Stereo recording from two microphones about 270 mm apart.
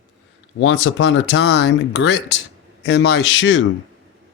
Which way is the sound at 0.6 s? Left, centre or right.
Left.